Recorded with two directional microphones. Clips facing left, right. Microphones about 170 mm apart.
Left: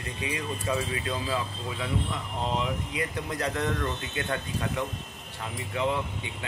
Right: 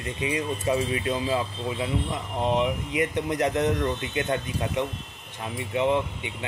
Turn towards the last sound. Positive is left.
turn(degrees=-20)  # may be behind; listen again after turning